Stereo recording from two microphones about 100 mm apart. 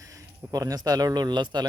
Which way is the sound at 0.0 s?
35° right (ahead or behind).